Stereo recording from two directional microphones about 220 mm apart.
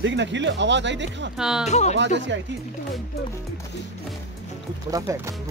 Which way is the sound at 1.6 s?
30° left (ahead or behind).